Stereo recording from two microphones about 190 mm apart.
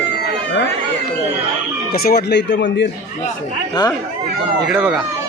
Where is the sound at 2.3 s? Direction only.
65° left (ahead or behind).